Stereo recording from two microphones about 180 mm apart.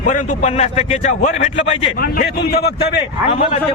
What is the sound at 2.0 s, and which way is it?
Speech, 55° left (ahead or behind).